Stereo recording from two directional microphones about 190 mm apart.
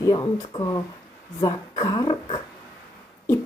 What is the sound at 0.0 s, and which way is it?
Speech, 20° left (ahead or behind).